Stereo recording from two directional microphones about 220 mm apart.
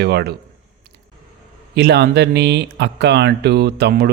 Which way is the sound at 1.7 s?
50° right (ahead or behind).